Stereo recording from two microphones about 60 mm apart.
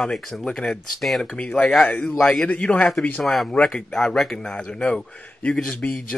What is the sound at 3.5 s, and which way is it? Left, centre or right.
Speech, left.